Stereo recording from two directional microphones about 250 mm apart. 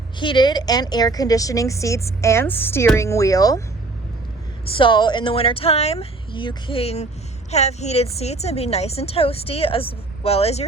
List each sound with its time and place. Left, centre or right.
0.2 s a woman's voice: centre
4.8 s a woman's voice: centre